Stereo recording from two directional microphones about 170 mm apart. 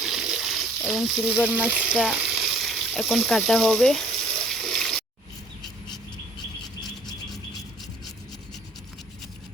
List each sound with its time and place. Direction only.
0.0 s speech: centre (ahead or behind)
4.5 s water: centre (ahead or behind)